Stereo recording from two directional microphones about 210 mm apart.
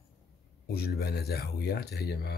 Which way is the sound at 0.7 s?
50° left (ahead or behind).